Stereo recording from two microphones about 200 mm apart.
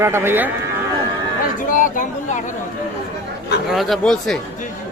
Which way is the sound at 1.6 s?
40° left (ahead or behind).